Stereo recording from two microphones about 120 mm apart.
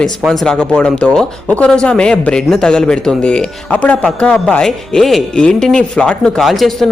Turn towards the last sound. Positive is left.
turn(degrees=0)  # may be behind; listen again after turning